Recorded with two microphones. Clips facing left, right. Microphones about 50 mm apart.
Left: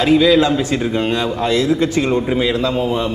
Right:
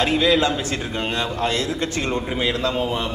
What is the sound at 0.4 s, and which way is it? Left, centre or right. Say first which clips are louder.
A man's voice: left 6 dB; centre.